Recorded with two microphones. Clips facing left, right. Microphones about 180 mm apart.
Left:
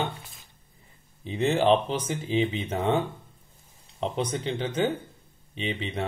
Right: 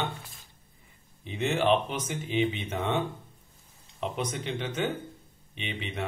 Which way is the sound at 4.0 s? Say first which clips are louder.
Left 4 dB; 30° left (ahead or behind).